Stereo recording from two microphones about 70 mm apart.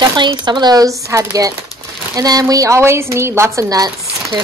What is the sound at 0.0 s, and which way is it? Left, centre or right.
Speech, right.